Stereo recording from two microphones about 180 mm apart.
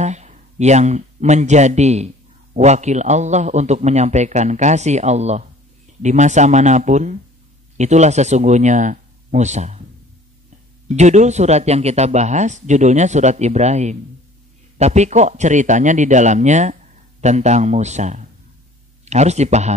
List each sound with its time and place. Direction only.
0.0 s speech: 40° right (ahead or behind)
10.9 s speech: 40° right (ahead or behind)